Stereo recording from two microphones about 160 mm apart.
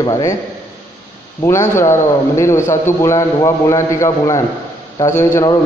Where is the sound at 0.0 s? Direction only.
20° left (ahead or behind).